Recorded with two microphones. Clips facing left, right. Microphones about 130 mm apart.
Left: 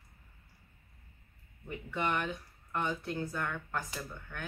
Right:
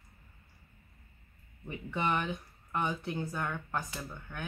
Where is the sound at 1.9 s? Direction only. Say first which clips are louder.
Right 1 dB; 15° right (ahead or behind).